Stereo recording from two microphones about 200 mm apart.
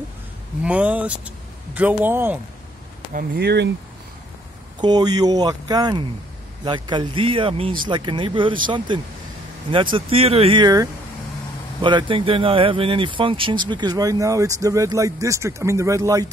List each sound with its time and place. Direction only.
0.6 s speech: 5° right (ahead or behind)
3.1 s speech: 50° right (ahead or behind)
4.7 s speech: 20° right (ahead or behind)